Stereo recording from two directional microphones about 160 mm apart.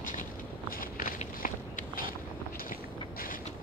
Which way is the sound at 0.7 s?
65° left (ahead or behind).